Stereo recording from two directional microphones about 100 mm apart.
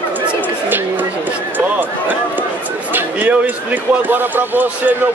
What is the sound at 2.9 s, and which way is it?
Speech, 15° right (ahead or behind).